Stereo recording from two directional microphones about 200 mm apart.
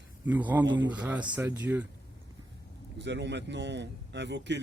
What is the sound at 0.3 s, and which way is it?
Speech, 10° right (ahead or behind).